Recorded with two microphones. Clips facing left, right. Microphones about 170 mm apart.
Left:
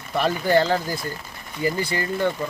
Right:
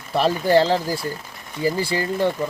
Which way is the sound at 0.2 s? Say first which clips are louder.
Right 3 dB; 30° right (ahead or behind).